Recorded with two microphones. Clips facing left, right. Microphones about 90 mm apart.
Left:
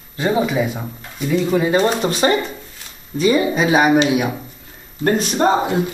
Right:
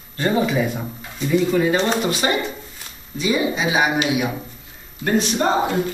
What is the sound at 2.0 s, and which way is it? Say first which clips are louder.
Speech: left 4 dB; 35° left (ahead or behind).